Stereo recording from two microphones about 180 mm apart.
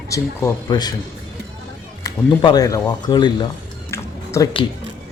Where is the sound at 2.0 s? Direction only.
20° left (ahead or behind).